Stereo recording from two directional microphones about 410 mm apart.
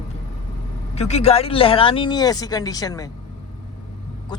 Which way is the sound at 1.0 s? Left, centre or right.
Centre.